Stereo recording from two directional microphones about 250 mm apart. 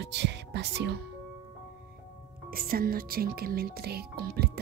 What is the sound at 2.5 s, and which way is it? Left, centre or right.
Speech, right.